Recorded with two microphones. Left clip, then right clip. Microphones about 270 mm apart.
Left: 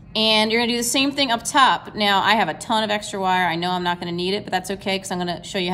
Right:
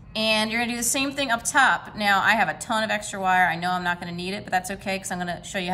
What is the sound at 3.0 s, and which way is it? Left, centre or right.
Speech, centre.